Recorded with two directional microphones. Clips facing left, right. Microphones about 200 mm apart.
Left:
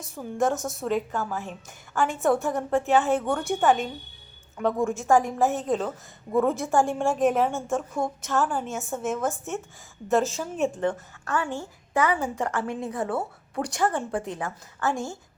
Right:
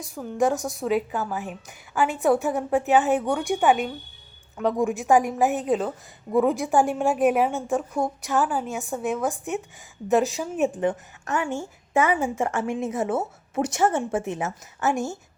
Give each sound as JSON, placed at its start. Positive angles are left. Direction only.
{"t": 0.0, "sound": "a woman's voice", "side_deg": 0}
{"t": 4.8, "sound": "a woman's voice", "side_deg": -15}
{"t": 5.6, "sound": "a woman's voice", "side_deg": -5}
{"t": 9.3, "sound": "a woman's voice", "side_deg": -15}